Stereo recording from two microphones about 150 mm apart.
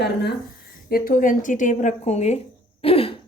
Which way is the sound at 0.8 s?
75° left (ahead or behind).